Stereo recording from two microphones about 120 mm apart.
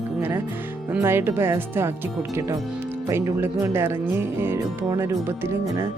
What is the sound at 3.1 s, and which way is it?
Speech, 20° right (ahead or behind).